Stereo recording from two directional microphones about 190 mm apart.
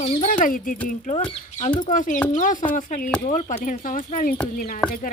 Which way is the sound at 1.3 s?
30° left (ahead or behind).